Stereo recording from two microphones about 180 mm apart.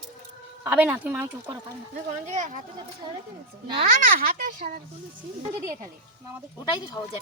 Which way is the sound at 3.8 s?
45° right (ahead or behind).